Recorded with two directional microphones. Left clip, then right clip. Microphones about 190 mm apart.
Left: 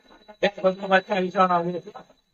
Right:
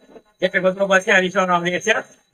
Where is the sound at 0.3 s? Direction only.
65° right (ahead or behind).